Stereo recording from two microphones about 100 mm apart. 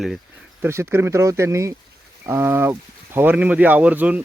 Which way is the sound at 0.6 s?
25° right (ahead or behind).